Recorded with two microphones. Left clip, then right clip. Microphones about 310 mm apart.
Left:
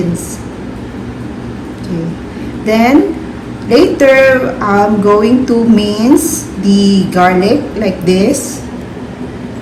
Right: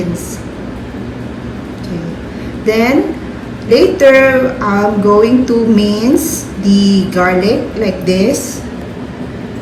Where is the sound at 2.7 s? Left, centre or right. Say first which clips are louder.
Left 2 dB; centre.